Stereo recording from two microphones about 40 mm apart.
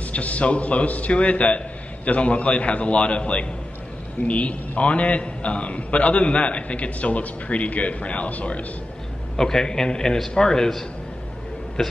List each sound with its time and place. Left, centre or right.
0.0 s a man's voice: left
9.4 s a man's voice: centre